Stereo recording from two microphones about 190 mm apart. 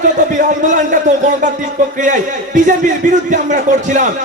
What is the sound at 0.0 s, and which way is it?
A man's voice, 40° right (ahead or behind).